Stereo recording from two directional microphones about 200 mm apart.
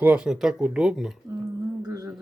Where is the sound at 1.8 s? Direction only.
15° right (ahead or behind).